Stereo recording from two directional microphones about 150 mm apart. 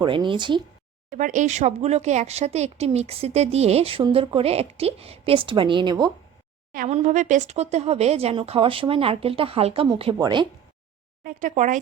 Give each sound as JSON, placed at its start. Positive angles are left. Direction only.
{"t": 0.0, "sound": "speech", "side_deg": -30}
{"t": 1.1, "sound": "speech", "side_deg": -55}
{"t": 6.8, "sound": "speech", "side_deg": -50}
{"t": 11.2, "sound": "speech", "side_deg": -65}